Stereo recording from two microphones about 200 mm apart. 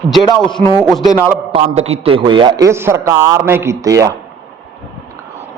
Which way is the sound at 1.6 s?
30° right (ahead or behind).